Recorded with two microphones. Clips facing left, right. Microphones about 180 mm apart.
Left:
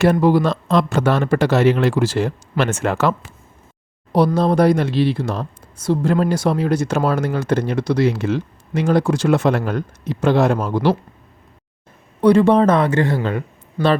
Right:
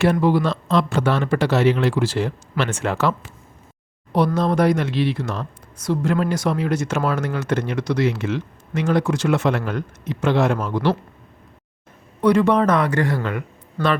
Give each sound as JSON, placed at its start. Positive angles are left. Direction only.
{"t": 0.0, "sound": "speech", "side_deg": 40}
{"t": 4.4, "sound": "speech", "side_deg": 35}
{"t": 12.2, "sound": "speech", "side_deg": 30}
{"t": 13.8, "sound": "speech", "side_deg": 10}